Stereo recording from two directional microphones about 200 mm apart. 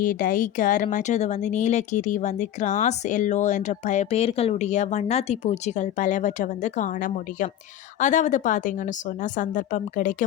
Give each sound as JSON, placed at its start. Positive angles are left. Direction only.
{"t": 0.0, "sound": "speech", "side_deg": 45}